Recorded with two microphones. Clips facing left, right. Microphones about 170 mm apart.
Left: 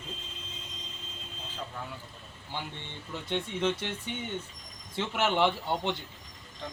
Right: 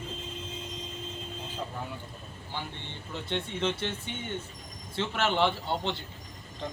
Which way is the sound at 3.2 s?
10° left (ahead or behind).